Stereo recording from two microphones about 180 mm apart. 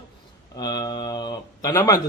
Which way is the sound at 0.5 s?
20° left (ahead or behind).